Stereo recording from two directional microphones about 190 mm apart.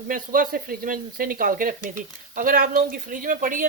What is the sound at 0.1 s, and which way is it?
Speech, 45° right (ahead or behind).